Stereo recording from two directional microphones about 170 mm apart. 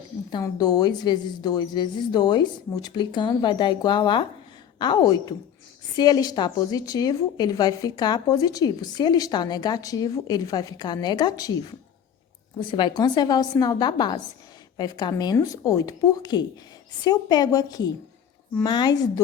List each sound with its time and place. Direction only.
0.3 s a woman's voice: 25° left (ahead or behind)
12.5 s a woman's voice: 25° left (ahead or behind)